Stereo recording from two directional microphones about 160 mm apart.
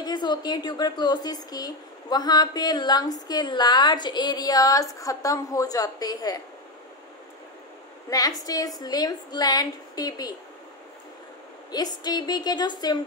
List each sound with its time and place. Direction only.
0.0 s a woman's voice: 25° left (ahead or behind)
8.1 s a woman's voice: 25° left (ahead or behind)
11.7 s a woman's voice: 25° left (ahead or behind)